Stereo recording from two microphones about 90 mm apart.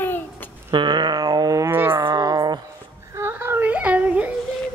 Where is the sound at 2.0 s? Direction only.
50° right (ahead or behind).